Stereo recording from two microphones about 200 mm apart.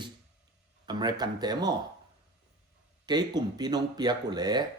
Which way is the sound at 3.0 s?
20° right (ahead or behind).